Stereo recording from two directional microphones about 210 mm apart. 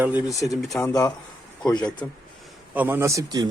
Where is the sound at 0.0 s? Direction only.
10° right (ahead or behind).